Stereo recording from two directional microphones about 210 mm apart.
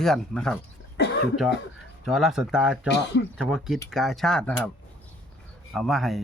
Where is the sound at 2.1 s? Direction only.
Centre (ahead or behind).